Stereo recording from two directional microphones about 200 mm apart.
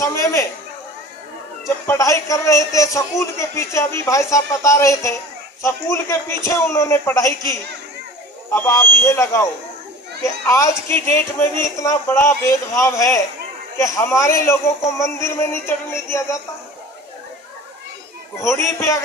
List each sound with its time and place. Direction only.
0.0 s a man's voice: 15° left (ahead or behind)
1.6 s a man's voice: 15° left (ahead or behind)
18.4 s a man's voice: 15° left (ahead or behind)